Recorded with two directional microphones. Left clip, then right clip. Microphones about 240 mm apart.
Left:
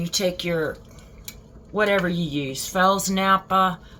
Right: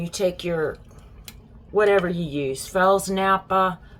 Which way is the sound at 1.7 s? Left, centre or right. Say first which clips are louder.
Right 2 dB; centre.